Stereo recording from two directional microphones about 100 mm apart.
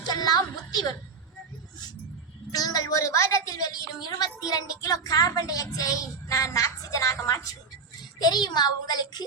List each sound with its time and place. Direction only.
0.0 s a child's voice: 45° left (ahead or behind)
2.5 s a woman's voice: 40° left (ahead or behind)
8.2 s a child's voice: 45° left (ahead or behind)